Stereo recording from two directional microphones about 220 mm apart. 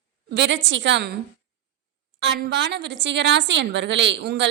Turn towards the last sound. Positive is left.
turn(degrees=-50)  # may be behind; listen again after turning